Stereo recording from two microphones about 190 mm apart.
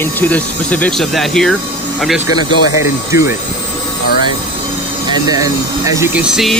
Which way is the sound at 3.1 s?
15° right (ahead or behind).